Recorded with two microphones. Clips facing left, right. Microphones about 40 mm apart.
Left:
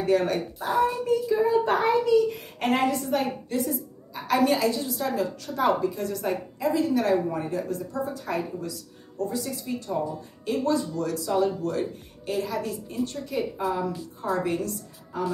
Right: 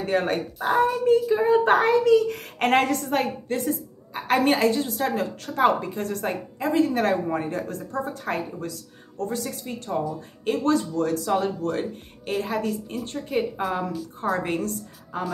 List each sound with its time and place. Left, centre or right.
0.0 s a child's voice: right